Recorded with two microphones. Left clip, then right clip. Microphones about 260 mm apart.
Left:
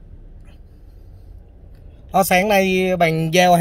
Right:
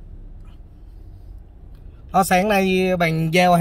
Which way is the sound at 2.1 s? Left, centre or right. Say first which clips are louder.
Left 2 dB; centre.